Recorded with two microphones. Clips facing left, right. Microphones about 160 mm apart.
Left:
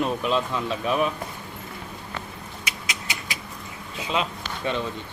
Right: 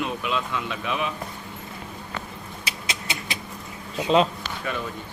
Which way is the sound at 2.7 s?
30° right (ahead or behind).